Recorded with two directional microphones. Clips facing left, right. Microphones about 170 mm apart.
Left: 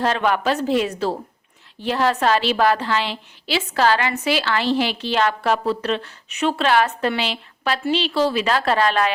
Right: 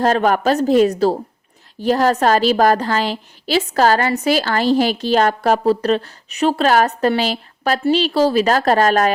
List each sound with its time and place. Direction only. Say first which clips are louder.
0.0 s a woman's voice: right 5 dB; 45° right (ahead or behind)